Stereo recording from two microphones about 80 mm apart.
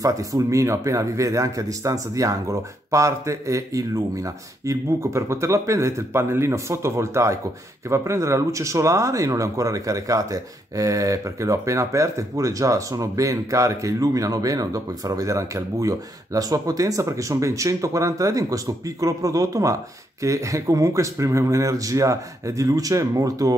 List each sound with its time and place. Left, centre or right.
0.0 s speech: right